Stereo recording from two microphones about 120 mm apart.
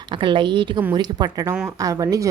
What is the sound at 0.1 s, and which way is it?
A woman's voice, 40° right (ahead or behind).